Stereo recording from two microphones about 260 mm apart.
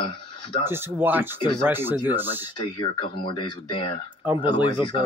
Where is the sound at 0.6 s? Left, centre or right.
Centre.